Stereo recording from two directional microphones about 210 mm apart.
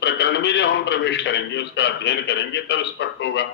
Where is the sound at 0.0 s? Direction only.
55° left (ahead or behind).